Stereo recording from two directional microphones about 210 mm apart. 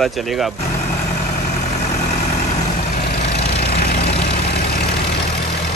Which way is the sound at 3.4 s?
50° left (ahead or behind).